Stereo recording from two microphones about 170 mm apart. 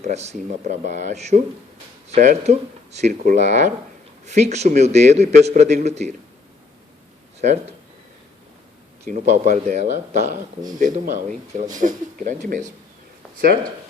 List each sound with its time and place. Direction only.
0.0 s a man's voice: 40° right (ahead or behind)
9.0 s speech: 45° right (ahead or behind)